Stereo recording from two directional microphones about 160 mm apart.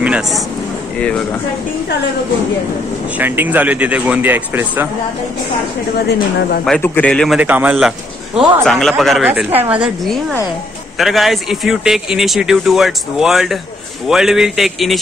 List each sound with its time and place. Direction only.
0.0 s a sound: 5° right (ahead or behind)
0.9 s speech: 5° left (ahead or behind)
3.2 s speech: 10° right (ahead or behind)
6.0 s speech: 70° left (ahead or behind)
6.8 s speech: 10° left (ahead or behind)
7.3 s speech: 10° right (ahead or behind)
8.4 s speech: centre (ahead or behind)
11.0 s speech: centre (ahead or behind)